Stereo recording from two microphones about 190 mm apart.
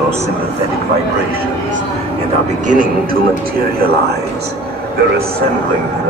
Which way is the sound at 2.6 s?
45° right (ahead or behind).